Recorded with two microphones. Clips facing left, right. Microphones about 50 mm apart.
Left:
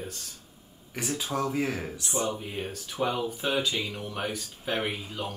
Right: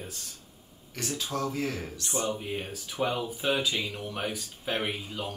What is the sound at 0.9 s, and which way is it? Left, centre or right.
Speech, centre.